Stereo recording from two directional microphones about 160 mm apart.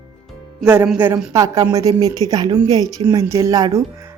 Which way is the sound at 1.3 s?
20° right (ahead or behind).